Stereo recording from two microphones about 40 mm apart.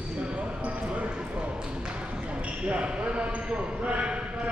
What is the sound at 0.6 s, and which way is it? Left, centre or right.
Basketball bounce, right.